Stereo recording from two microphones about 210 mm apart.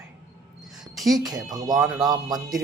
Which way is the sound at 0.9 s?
Centre (ahead or behind).